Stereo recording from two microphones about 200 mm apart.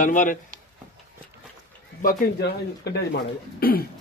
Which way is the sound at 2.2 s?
55° left (ahead or behind).